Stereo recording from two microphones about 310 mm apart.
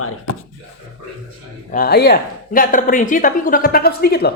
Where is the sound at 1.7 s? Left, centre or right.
Left.